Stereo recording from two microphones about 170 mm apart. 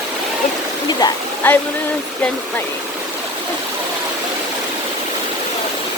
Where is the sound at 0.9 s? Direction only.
25° left (ahead or behind).